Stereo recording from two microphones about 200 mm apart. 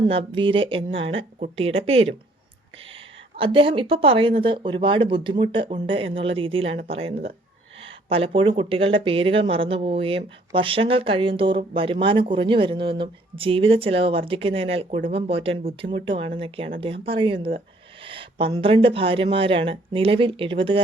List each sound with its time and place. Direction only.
0.0 s speech: 25° right (ahead or behind)